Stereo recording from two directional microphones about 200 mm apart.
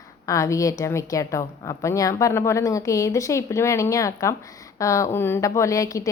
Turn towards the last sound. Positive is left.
turn(degrees=15)  # may be behind; listen again after turning